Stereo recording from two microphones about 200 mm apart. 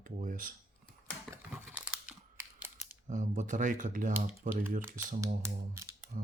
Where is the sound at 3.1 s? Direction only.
40° right (ahead or behind).